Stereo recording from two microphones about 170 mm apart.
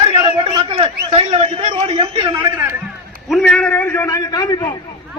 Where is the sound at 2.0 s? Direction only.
25° right (ahead or behind).